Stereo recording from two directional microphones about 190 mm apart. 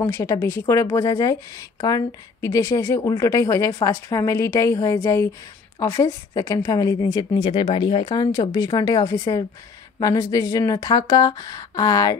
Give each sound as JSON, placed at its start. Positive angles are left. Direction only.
{"t": 0.0, "sound": "a woman's voice", "side_deg": 15}